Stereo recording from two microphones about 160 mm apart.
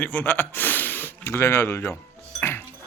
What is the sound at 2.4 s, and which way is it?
Dishes, 15° left (ahead or behind).